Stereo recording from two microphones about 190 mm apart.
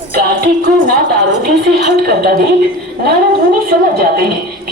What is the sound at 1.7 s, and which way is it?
Speech, 55° right (ahead or behind).